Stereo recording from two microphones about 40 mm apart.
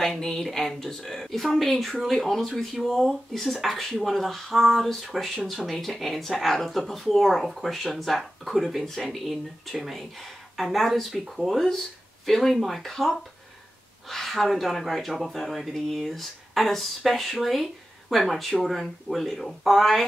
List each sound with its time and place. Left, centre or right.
0.0 s speech: centre